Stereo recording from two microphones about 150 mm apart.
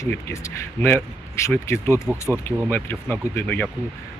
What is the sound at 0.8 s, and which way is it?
Speech, 15° left (ahead or behind).